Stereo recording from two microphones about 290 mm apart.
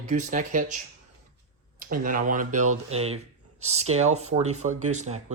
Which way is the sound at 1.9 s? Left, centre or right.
Right.